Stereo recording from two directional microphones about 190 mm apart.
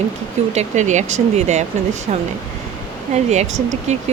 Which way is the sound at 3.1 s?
35° right (ahead or behind).